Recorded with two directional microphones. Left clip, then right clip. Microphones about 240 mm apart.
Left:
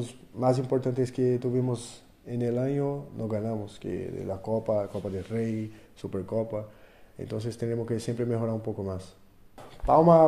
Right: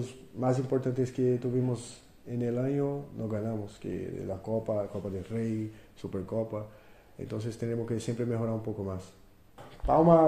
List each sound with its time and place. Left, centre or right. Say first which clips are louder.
0.0 s speech: left 5 dB; left